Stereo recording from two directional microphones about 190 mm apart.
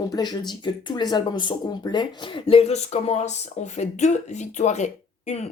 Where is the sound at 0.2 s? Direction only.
20° left (ahead or behind).